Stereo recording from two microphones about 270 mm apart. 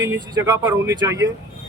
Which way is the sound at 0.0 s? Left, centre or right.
Centre.